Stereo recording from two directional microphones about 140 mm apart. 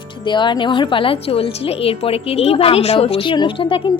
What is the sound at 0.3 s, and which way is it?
A woman's voice, 35° left (ahead or behind).